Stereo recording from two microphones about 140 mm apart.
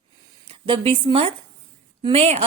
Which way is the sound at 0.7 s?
40° right (ahead or behind).